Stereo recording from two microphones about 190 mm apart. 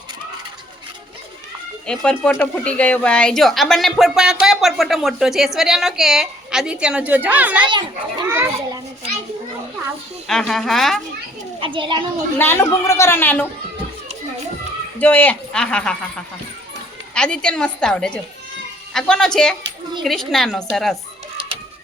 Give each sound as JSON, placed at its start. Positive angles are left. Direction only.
{"t": 1.9, "sound": "a woman's voice", "side_deg": 5}
{"t": 10.2, "sound": "a woman's voice", "side_deg": 0}
{"t": 11.6, "sound": "a child's voice", "side_deg": -25}
{"t": 12.4, "sound": "a woman's voice", "side_deg": 10}
{"t": 14.9, "sound": "a woman's voice", "side_deg": 10}